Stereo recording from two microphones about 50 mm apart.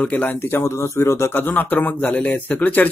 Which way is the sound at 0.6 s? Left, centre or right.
Left.